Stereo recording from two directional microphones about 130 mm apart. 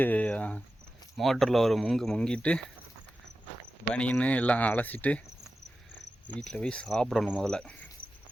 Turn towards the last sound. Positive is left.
turn(degrees=10)  # may be behind; listen again after turning